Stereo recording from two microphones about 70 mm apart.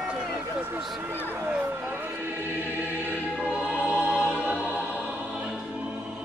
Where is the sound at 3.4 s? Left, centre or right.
Centre.